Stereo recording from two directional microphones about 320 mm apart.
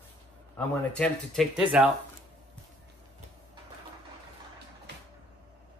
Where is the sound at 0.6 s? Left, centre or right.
Centre.